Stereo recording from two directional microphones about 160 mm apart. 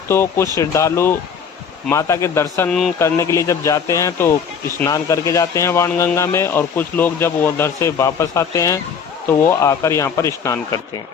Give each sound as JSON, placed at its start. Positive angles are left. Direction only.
{"t": 0.1, "sound": "speech", "side_deg": 15}
{"t": 2.6, "sound": "speech", "side_deg": 5}
{"t": 3.0, "sound": "speech", "side_deg": 20}